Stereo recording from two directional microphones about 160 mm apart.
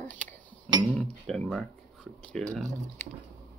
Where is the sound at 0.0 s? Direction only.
10° left (ahead or behind).